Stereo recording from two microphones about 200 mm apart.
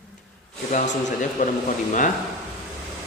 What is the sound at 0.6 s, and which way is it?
Speech, 40° left (ahead or behind).